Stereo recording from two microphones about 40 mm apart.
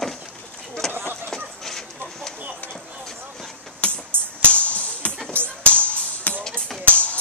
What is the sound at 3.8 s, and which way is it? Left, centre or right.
Music, left.